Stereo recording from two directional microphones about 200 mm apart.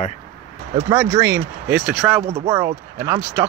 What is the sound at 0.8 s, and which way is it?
Speech, 15° right (ahead or behind).